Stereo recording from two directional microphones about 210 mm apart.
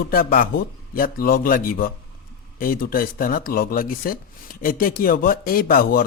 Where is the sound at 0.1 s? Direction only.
45° left (ahead or behind).